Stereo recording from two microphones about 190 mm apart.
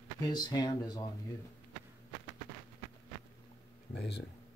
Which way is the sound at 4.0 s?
65° left (ahead or behind).